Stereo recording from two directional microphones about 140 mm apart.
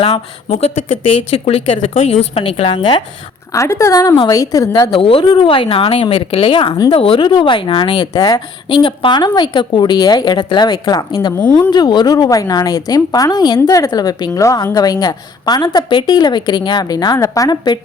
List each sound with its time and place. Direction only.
0.4 s a woman's voice: 50° left (ahead or behind); by 3.0 s 35° left (ahead or behind)
3.5 s a woman's voice: 20° left (ahead or behind)